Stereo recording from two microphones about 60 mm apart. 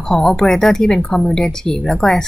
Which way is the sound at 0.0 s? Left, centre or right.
Centre.